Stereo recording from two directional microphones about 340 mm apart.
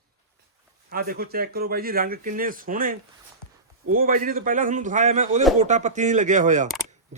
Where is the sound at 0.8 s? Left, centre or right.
Right.